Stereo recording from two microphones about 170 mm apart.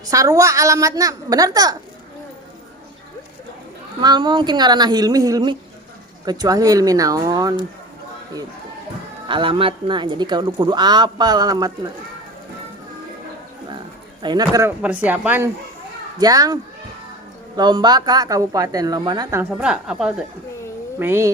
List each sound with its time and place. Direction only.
0.0 s speech: 20° right (ahead or behind)
4.0 s speech: 25° right (ahead or behind)
9.2 s speech: 30° right (ahead or behind)
13.7 s bird: 25° right (ahead or behind)
14.8 s speech: 10° right (ahead or behind)
16.1 s speech: 20° right (ahead or behind)
17.6 s speech: 25° right (ahead or behind)
19.4 s a woman's voice: 5° right (ahead or behind)